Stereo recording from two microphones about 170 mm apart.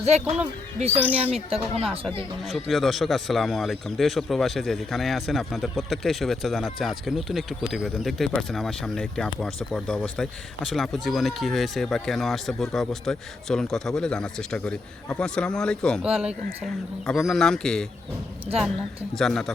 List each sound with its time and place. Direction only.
0.0 s speech: 40° right (ahead or behind)
2.5 s speech: centre (ahead or behind)
19.1 s speech: centre (ahead or behind)